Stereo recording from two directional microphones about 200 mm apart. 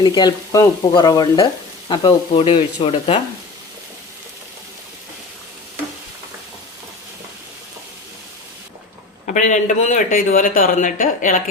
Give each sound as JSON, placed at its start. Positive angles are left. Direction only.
{"t": 0.0, "sound": "speech", "side_deg": 20}
{"t": 9.2, "sound": "a man's voice", "side_deg": 40}